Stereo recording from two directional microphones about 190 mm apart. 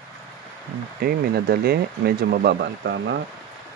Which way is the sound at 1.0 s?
55° right (ahead or behind).